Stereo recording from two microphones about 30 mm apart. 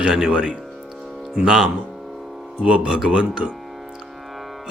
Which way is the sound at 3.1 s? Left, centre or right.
Right.